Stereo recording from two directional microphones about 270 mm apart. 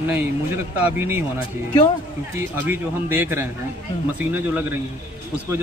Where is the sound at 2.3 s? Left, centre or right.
Centre.